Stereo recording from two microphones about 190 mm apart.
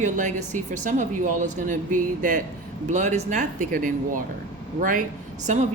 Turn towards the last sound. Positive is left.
turn(degrees=-40)  # may be behind; listen again after turning